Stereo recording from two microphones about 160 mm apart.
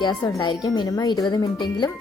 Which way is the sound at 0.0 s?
30° left (ahead or behind).